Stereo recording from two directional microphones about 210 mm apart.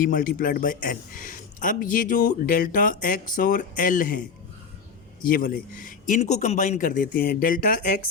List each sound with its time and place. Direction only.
0.0 s a man's voice: 40° left (ahead or behind)
5.2 s a man's voice: 45° left (ahead or behind)